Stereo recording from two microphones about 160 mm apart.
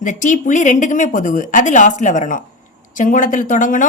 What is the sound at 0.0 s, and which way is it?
A woman's voice, 55° left (ahead or behind).